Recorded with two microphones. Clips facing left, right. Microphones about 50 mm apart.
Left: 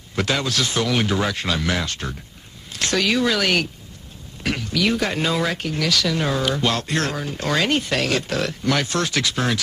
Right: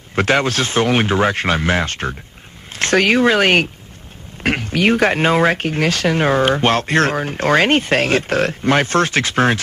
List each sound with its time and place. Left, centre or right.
0.1 s speech: right